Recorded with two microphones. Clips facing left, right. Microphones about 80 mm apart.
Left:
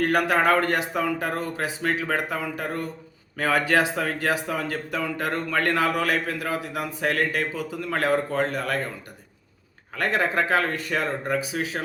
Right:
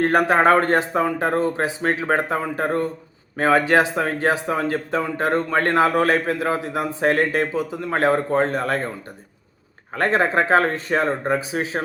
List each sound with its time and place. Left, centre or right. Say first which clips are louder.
0.0 s a man's voice: right 5 dB; right
9.9 s a man's voice: right 5 dB; right